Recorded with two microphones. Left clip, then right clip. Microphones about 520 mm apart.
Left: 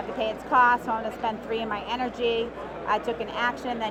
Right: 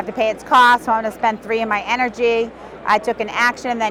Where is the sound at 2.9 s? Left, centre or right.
Right.